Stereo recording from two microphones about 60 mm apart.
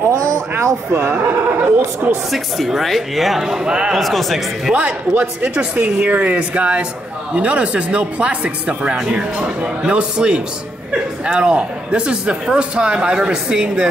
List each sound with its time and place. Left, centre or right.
0.9 s speech: right
2.3 s speech: centre
4.0 s speech: centre
5.2 s speech: right